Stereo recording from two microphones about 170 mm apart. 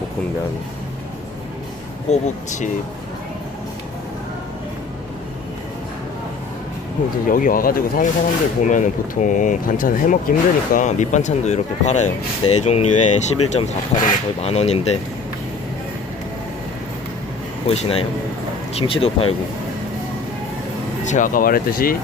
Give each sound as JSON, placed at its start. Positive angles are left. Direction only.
{"t": 2.0, "sound": "speech", "side_deg": 45}
{"t": 7.3, "sound": "speech", "side_deg": 55}
{"t": 17.7, "sound": "speech", "side_deg": 35}
{"t": 21.0, "sound": "speech", "side_deg": 45}